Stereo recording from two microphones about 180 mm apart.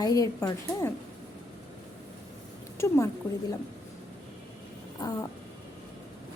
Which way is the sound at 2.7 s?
15° left (ahead or behind).